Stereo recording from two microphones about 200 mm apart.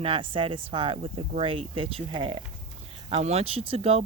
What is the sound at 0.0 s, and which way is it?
Speech, 25° right (ahead or behind).